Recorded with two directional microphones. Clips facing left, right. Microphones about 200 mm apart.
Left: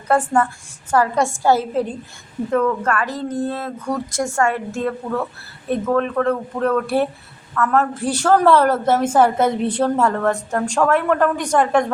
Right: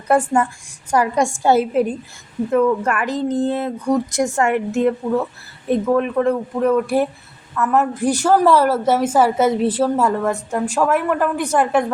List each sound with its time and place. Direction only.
0.9 s a woman's voice: 15° right (ahead or behind)